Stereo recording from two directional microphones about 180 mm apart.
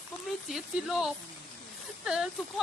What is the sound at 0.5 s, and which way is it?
Speech, 5° right (ahead or behind).